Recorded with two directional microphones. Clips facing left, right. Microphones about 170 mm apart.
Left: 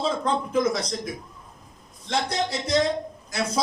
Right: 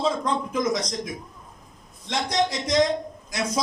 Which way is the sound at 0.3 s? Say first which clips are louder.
Left 1 dB; 30° left (ahead or behind).